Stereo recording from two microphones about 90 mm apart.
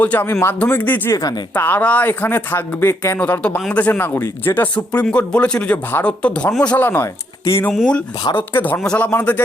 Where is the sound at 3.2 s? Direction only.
15° left (ahead or behind).